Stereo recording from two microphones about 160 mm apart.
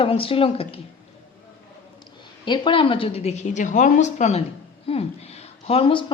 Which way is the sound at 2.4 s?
30° left (ahead or behind).